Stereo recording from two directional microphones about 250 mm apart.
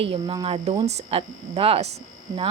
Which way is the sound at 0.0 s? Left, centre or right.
Right.